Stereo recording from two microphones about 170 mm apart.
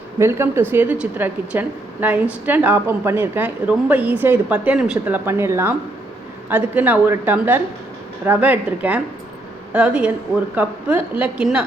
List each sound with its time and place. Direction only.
0.2 s a woman's voice: 15° right (ahead or behind)